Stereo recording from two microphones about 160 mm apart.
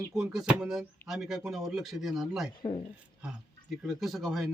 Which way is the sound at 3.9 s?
Centre (ahead or behind).